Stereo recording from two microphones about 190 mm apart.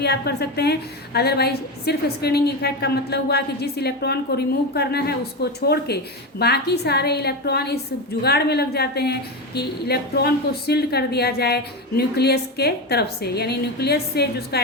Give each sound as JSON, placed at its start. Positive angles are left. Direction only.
{"t": 0.0, "sound": "a woman's voice", "side_deg": 60}